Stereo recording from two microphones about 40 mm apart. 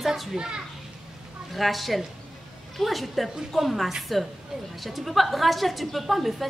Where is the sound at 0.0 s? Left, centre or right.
Centre.